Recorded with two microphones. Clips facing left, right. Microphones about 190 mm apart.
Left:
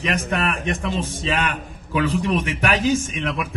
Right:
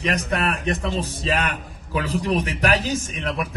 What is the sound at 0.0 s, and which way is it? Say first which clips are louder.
Speech: even; 35° right (ahead or behind).